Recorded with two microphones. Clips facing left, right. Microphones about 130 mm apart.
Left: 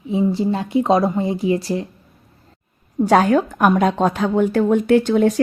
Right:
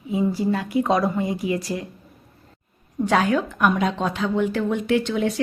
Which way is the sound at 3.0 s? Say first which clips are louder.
Left 6 dB; 40° left (ahead or behind).